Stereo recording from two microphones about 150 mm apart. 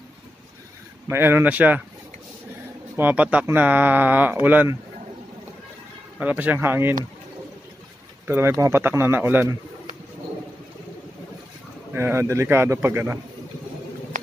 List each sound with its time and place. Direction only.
1.0 s speech: 15° right (ahead or behind)
3.0 s speech: 10° right (ahead or behind)
6.1 s speech: 10° right (ahead or behind)
8.3 s speech: 20° right (ahead or behind)
11.9 s speech: 15° right (ahead or behind)